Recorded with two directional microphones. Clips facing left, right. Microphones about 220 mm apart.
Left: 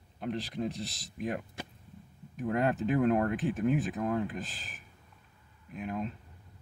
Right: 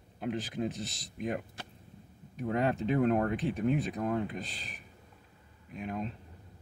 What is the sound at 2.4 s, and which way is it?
Speech, centre (ahead or behind).